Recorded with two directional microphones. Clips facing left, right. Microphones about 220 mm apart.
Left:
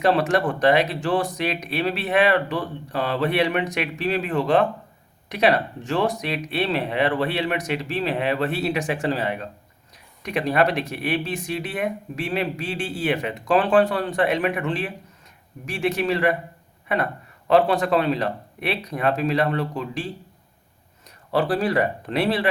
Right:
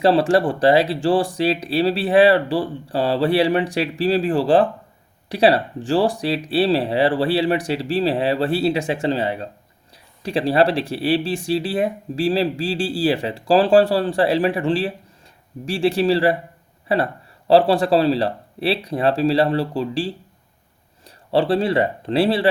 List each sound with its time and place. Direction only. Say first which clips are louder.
0.0 s speech: right 4 dB; 30° right (ahead or behind)